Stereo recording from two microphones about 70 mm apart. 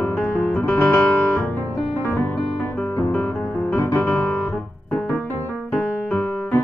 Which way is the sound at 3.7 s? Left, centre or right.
Left.